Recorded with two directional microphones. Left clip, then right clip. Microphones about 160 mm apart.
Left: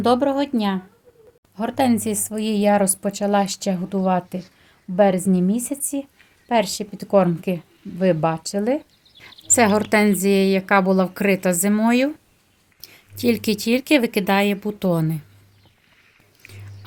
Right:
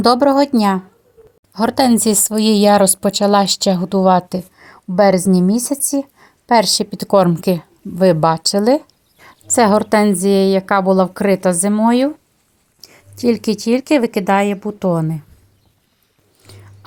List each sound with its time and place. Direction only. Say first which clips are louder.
0.0 s a woman's voice: right 7 dB; 50° right (ahead or behind)
9.2 s a woman's voice: right 4 dB; 30° right (ahead or behind)